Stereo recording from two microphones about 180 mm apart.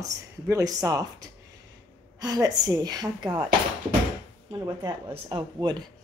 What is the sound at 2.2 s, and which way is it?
Speech, 20° right (ahead or behind).